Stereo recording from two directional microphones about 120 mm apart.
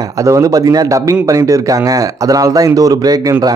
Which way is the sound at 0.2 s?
25° right (ahead or behind).